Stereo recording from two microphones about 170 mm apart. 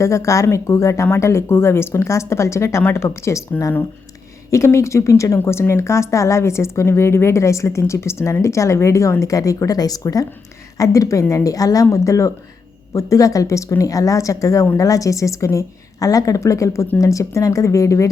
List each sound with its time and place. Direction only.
0.0 s speech: 15° left (ahead or behind)